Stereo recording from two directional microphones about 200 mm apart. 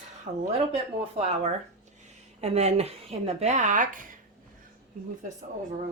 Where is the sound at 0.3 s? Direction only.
45° right (ahead or behind).